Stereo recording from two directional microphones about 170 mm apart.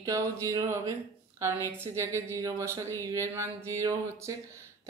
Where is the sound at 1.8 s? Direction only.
15° right (ahead or behind).